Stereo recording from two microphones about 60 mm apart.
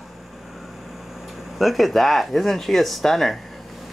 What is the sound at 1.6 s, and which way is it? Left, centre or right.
Speech, centre.